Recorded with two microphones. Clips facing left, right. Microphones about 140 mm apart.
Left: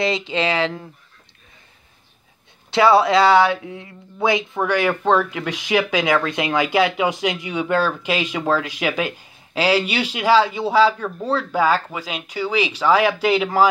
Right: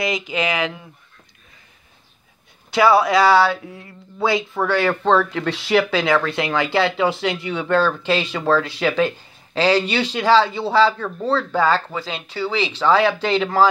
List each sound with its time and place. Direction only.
0.0 s speech: 30° left (ahead or behind)
2.7 s speech: 25° left (ahead or behind)